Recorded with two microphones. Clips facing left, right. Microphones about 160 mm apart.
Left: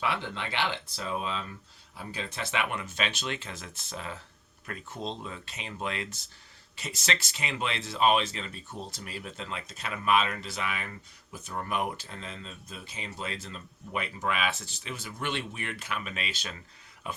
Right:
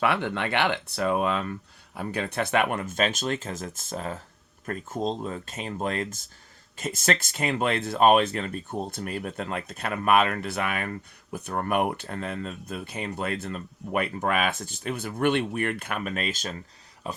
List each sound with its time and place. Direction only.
0.0 s speech: 60° right (ahead or behind); by 17.2 s 35° right (ahead or behind)